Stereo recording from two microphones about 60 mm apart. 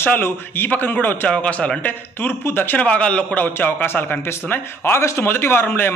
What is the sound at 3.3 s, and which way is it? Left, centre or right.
A man's voice, left.